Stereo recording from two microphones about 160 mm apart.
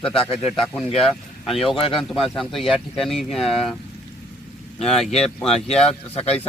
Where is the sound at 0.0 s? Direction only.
5° left (ahead or behind).